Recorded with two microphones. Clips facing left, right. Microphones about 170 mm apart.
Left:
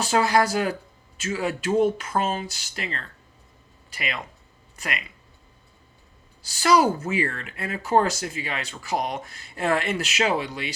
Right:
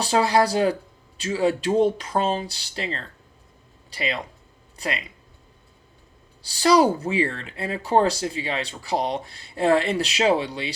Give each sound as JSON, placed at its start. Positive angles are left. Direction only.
{"t": 0.0, "sound": "speech", "side_deg": -30}
{"t": 6.4, "sound": "speech", "side_deg": -35}